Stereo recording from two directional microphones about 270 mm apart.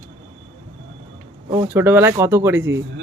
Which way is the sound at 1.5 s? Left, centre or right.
Centre.